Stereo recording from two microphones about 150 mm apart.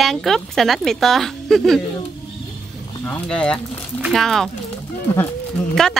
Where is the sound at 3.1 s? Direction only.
5° left (ahead or behind).